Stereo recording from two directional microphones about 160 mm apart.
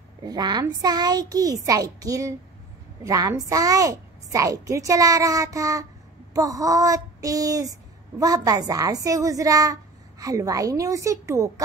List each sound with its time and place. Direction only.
0.2 s a woman's voice: 25° right (ahead or behind)